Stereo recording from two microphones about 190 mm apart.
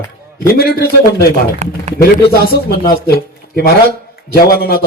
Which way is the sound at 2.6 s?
55° left (ahead or behind).